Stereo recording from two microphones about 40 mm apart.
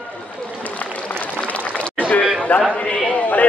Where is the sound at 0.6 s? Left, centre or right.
Left.